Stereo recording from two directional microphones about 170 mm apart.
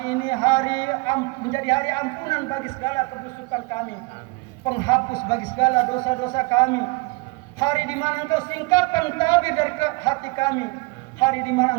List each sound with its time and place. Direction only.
0.0 s a sound: 20° left (ahead or behind)
1.5 s a man's voice: 20° left (ahead or behind)
4.6 s a man's voice: 20° left (ahead or behind)